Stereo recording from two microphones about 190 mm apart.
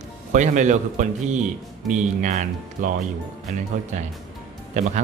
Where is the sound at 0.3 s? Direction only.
40° right (ahead or behind).